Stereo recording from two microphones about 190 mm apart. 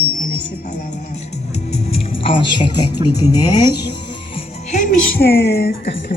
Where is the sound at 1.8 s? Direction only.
30° left (ahead or behind).